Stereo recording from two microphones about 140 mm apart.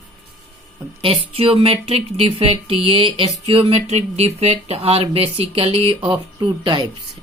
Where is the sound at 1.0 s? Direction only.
40° right (ahead or behind).